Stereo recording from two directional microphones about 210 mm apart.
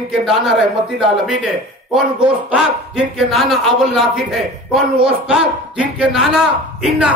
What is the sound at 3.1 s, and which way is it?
A man's voice, centre (ahead or behind).